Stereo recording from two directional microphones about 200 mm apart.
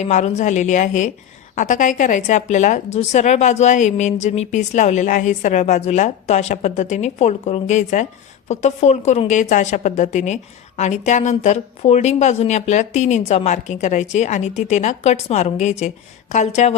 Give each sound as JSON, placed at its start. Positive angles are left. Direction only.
{"t": 0.0, "sound": "a woman's voice", "side_deg": 35}